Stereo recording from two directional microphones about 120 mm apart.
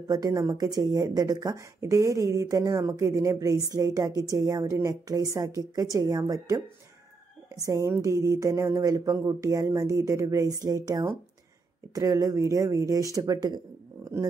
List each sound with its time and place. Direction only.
0.1 s speech: 30° right (ahead or behind)
7.6 s speech: 25° right (ahead or behind)